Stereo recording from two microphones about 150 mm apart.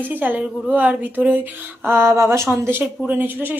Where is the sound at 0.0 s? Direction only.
10° right (ahead or behind).